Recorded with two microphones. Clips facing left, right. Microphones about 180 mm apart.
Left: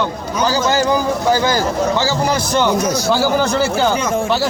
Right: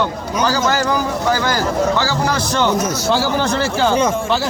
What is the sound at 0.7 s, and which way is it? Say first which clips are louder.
A man's voice: left 2 dB; 25° left (ahead or behind).